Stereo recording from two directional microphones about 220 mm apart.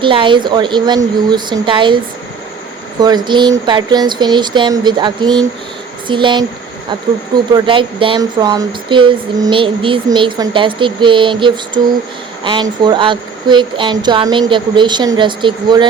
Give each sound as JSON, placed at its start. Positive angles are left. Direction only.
{"t": 0.0, "sound": "speech", "side_deg": -20}
{"t": 3.0, "sound": "speech", "side_deg": -20}
{"t": 7.5, "sound": "speech", "side_deg": -25}